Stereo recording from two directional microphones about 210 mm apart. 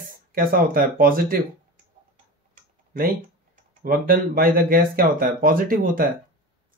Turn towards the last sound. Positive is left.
turn(degrees=-40)  # may be behind; listen again after turning